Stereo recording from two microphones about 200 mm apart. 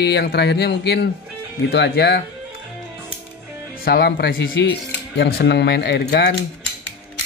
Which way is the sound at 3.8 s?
50° left (ahead or behind).